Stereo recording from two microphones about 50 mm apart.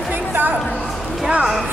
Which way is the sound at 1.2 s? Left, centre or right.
Centre.